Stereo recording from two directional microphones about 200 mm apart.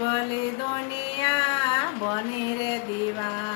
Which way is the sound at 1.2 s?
25° left (ahead or behind).